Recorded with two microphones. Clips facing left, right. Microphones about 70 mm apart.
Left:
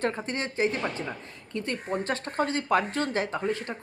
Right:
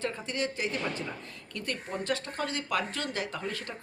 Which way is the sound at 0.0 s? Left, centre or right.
Left.